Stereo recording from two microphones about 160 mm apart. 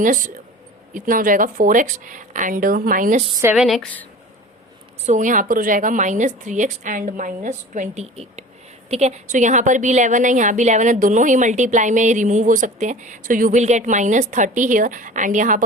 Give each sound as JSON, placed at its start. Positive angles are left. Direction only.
{"t": 0.0, "sound": "speech", "side_deg": -55}
{"t": 3.5, "sound": "speech", "side_deg": 0}
{"t": 5.0, "sound": "a woman's voice", "side_deg": -50}